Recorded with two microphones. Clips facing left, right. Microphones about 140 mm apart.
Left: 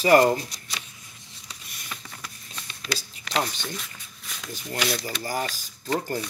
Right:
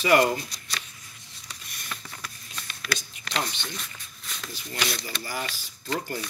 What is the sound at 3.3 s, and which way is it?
Speech, 35° left (ahead or behind).